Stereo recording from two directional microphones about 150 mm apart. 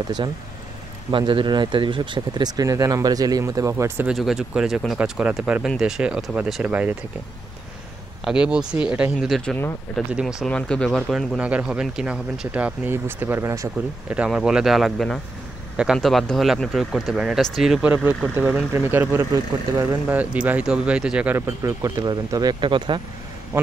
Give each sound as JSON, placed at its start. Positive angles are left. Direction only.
{"t": 1.1, "sound": "speech", "side_deg": -35}
{"t": 4.1, "sound": "speech", "side_deg": 0}
{"t": 8.2, "sound": "speech", "side_deg": -5}
{"t": 14.0, "sound": "speech", "side_deg": -5}
{"t": 23.5, "sound": "speech", "side_deg": -20}